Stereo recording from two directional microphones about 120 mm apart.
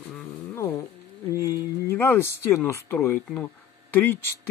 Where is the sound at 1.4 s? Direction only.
20° left (ahead or behind).